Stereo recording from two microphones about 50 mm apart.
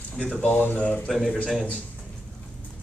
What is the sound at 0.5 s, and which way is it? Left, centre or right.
Speech, left.